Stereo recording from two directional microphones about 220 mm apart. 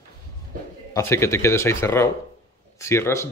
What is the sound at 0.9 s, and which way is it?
Speech, 10° left (ahead or behind).